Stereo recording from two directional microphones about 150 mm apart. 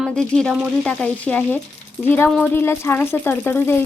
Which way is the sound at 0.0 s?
5° left (ahead or behind).